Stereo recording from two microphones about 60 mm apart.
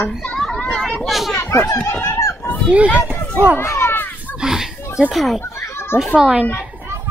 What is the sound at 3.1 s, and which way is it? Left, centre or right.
Run, right.